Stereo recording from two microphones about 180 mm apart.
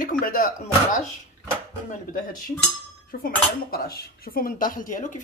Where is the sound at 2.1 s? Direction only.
50° left (ahead or behind).